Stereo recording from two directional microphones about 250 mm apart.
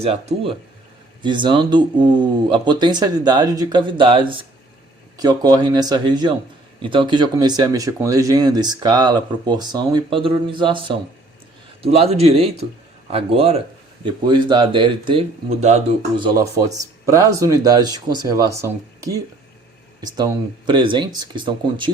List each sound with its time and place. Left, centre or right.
0.0 s speech: right